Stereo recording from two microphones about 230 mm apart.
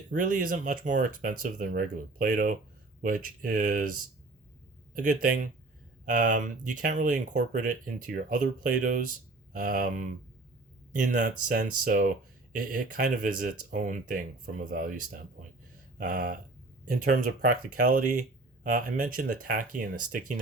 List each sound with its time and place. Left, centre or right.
0.1 s speech: right
4.9 s speech: right